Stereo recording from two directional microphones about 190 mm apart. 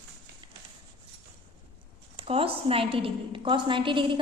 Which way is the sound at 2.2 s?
30° right (ahead or behind).